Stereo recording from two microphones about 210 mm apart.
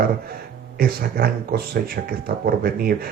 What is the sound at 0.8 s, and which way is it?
Speech, 45° right (ahead or behind).